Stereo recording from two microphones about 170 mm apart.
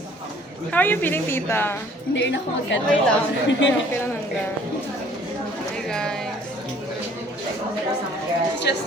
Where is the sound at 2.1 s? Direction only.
90° left.